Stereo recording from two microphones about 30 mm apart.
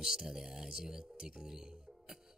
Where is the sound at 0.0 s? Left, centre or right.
Centre.